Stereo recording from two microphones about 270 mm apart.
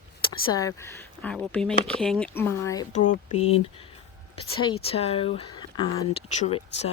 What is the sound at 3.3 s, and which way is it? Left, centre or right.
Speech, left.